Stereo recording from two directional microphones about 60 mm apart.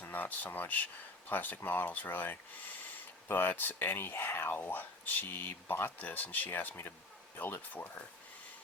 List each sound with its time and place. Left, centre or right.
0.0 s speech: left